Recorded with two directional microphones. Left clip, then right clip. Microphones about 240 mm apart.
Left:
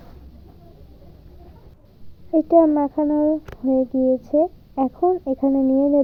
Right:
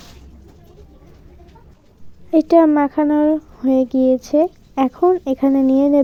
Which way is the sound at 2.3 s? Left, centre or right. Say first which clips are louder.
Right 3 dB; right.